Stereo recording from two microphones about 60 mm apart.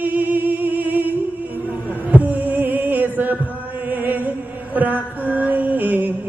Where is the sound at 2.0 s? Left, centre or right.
Right.